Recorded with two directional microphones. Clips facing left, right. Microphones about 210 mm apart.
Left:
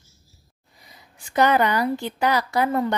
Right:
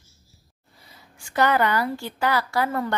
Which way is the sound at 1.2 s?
20° left (ahead or behind).